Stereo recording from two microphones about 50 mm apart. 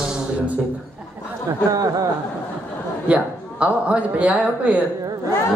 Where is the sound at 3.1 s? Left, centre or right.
Right.